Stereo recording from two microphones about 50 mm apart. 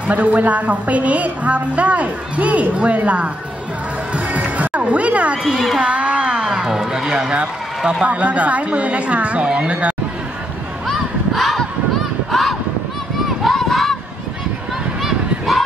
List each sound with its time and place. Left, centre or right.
0.0 s a woman's voice: right
4.1 s music: right
5.4 s speech: centre
5.8 s a woman's voice: right
10.9 s a sound: centre
15.0 s honk: centre